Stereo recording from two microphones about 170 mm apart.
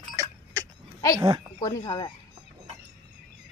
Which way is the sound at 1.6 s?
20° left (ahead or behind).